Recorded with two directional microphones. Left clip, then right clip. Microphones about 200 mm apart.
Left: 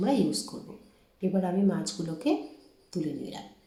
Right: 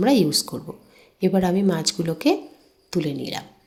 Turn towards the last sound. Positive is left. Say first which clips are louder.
# right 9 dB
turn(degrees=-50)  # may be behind; listen again after turning